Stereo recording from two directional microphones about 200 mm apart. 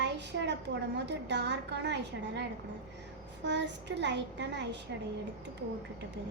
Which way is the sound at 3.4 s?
60° right (ahead or behind).